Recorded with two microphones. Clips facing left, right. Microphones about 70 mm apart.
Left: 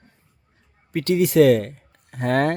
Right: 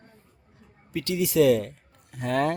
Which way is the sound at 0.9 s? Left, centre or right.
Left.